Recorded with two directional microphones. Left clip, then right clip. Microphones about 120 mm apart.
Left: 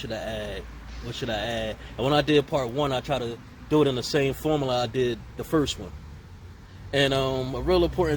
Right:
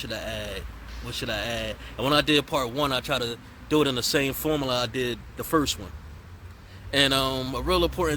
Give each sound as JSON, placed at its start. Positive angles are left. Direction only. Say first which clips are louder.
{"t": 0.0, "sound": "speech", "louder": "left 1 dB", "side_deg": -25}
{"t": 6.9, "sound": "a man's voice", "louder": "right 1 dB", "side_deg": -35}